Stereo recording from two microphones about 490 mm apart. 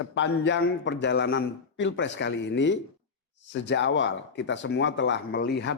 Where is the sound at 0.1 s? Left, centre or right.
Left.